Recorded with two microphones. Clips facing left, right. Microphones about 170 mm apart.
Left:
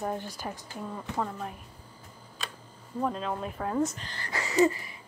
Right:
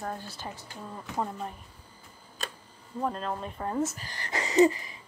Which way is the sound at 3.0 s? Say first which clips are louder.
Left 1 dB; centre (ahead or behind).